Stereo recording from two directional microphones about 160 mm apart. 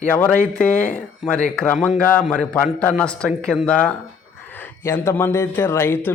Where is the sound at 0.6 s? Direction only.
10° left (ahead or behind).